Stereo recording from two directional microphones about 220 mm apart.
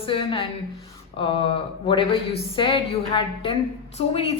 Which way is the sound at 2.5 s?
25° left (ahead or behind).